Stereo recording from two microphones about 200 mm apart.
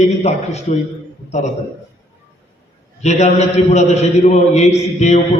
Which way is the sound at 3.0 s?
35° left (ahead or behind).